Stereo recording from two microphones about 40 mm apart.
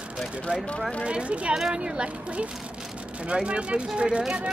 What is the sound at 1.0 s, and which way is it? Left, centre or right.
Speech, right.